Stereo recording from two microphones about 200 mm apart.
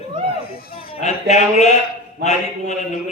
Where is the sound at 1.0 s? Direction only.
35° left (ahead or behind).